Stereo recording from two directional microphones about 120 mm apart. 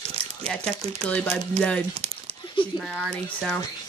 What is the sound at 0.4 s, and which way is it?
Speech, 10° left (ahead or behind).